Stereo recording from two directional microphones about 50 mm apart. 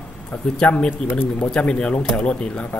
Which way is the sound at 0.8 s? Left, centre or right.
Left.